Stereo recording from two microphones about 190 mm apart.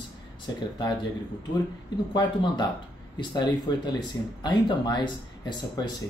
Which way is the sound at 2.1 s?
25° left (ahead or behind).